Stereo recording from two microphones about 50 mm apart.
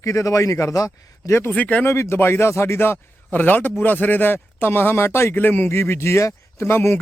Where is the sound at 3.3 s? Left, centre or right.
Left.